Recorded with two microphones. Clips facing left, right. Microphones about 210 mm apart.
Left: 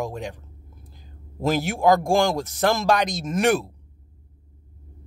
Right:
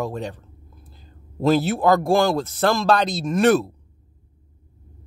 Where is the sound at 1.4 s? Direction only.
15° left (ahead or behind).